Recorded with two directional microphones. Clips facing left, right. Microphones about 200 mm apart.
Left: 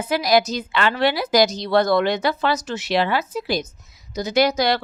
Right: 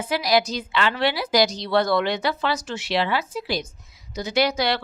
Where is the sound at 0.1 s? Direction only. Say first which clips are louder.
Left 3 dB; 50° left (ahead or behind).